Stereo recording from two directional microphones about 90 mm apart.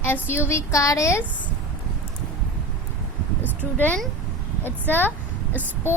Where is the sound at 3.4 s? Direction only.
20° left (ahead or behind).